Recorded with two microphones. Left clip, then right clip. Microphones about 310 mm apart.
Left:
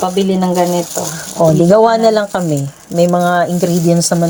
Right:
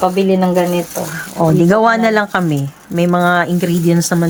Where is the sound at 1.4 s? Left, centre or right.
Centre.